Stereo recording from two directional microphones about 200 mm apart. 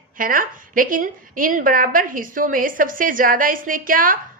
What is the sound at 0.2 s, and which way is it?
A woman's voice, 45° right (ahead or behind).